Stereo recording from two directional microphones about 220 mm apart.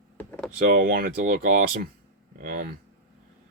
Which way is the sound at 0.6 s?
40° right (ahead or behind).